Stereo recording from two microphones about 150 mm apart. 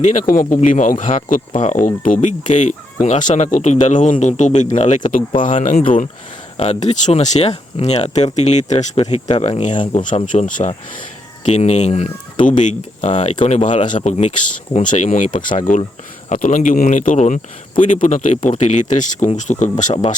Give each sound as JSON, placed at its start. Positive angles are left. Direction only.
{"t": 0.3, "sound": "speech", "side_deg": 65}
{"t": 6.6, "sound": "speech", "side_deg": 45}